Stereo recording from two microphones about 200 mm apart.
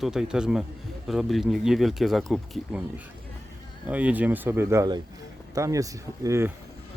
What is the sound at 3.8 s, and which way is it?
Speech, 5° right (ahead or behind).